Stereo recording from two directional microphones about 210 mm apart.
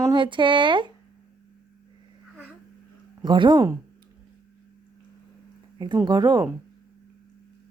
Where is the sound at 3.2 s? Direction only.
20° right (ahead or behind).